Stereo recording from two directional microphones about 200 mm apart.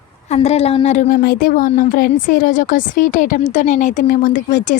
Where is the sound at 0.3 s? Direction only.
30° left (ahead or behind).